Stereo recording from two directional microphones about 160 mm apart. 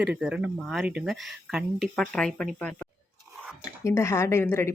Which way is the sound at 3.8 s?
15° left (ahead or behind).